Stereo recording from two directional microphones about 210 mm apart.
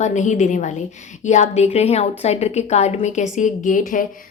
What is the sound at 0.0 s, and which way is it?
A woman's voice, 35° left (ahead or behind).